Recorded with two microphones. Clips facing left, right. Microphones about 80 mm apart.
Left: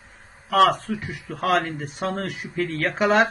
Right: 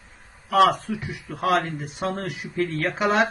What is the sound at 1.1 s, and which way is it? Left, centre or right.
Speech, centre.